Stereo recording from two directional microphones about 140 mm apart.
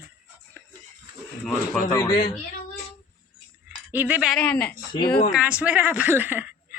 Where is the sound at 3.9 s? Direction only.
10° right (ahead or behind).